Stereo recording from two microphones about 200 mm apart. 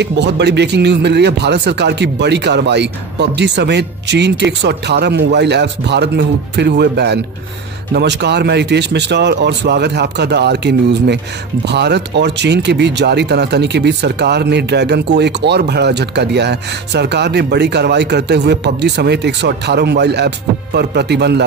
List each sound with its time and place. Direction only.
0.0 s speech: 60° right (ahead or behind)